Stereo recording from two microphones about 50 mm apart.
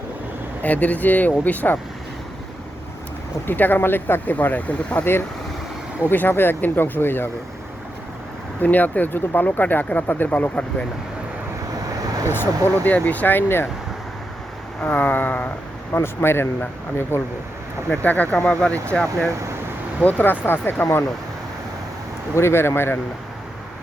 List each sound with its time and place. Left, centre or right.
0.6 s speech: left
3.4 s speech: left
6.0 s speech: left
8.6 s speech: left
12.3 s speech: left
14.8 s speech: left
15.9 s speech: left
17.9 s speech: left
22.4 s speech: left